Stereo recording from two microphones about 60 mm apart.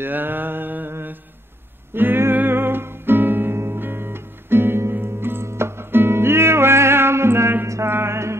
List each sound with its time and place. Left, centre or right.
0.0 s mantra: right
2.0 s music: right
7.6 s mantra: right
7.9 s music: right